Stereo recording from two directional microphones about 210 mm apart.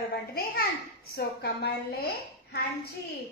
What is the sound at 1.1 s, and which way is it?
Speech, 50° left (ahead or behind).